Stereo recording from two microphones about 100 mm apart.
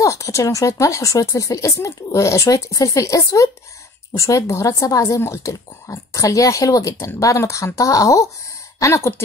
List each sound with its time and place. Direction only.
0.0 s a woman's voice: 35° left (ahead or behind)